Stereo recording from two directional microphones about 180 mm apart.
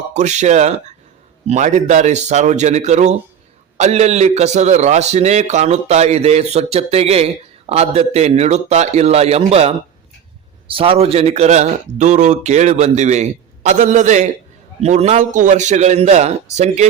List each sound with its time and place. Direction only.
0.1 s a man's voice: 40° right (ahead or behind)